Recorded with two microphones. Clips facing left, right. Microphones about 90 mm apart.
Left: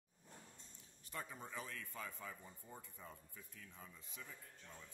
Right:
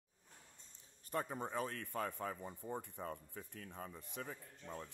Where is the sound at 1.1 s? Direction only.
50° right (ahead or behind).